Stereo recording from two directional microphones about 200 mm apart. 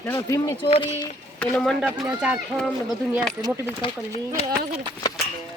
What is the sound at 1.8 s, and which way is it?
A woman's voice, 5° right (ahead or behind).